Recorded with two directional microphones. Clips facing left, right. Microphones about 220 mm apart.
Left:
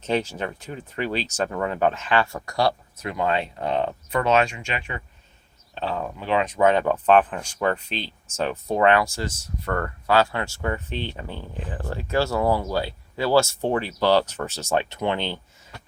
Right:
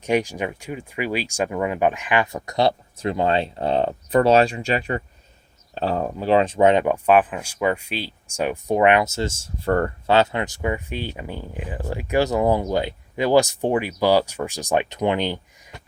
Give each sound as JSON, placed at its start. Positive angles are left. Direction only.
{"t": 0.0, "sound": "speech", "side_deg": -15}